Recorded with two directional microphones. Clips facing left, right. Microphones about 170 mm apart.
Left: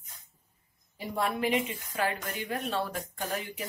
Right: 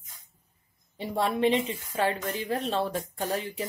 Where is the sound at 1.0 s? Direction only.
30° right (ahead or behind).